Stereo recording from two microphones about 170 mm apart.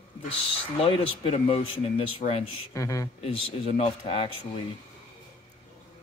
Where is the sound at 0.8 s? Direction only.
35° left (ahead or behind).